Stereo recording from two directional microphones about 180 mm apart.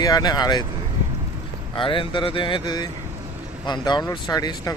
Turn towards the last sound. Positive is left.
turn(degrees=20)  # may be behind; listen again after turning